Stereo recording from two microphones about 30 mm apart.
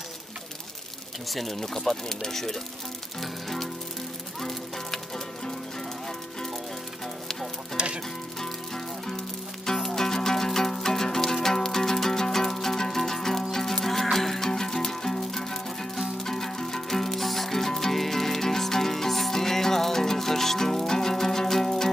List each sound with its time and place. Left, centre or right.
1.3 s speech: centre
1.9 s speech: centre
3.2 s music: centre
7.7 s music: right
8.4 s music: centre